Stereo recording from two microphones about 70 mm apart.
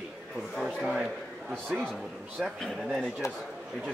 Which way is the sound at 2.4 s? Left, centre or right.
Centre.